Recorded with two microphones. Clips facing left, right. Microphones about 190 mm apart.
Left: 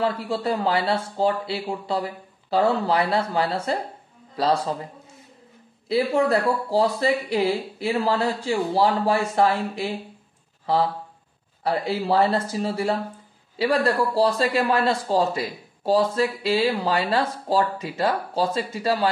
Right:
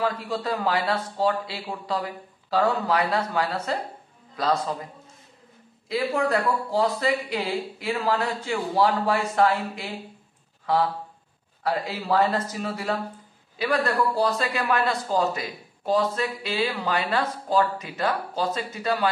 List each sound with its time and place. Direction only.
0.0 s speech: 30° left (ahead or behind)
5.9 s speech: 30° left (ahead or behind)
11.6 s speech: 30° left (ahead or behind)